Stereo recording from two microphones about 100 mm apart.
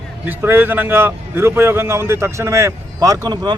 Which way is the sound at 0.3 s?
20° right (ahead or behind).